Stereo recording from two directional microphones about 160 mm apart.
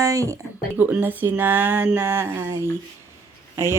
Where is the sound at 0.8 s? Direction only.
10° right (ahead or behind).